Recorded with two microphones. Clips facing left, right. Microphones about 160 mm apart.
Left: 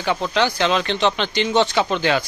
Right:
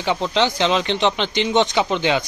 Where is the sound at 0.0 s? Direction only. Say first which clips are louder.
Right 1 dB; 20° right (ahead or behind).